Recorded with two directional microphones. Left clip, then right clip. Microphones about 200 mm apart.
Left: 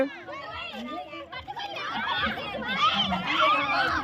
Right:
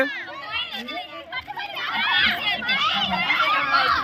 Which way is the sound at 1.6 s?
50° left (ahead or behind).